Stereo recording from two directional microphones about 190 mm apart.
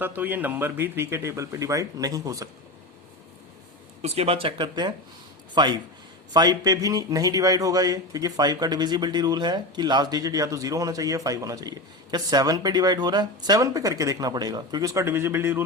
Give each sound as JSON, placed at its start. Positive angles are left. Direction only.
{"t": 0.0, "sound": "speech", "side_deg": -10}
{"t": 4.0, "sound": "a man's voice", "side_deg": -35}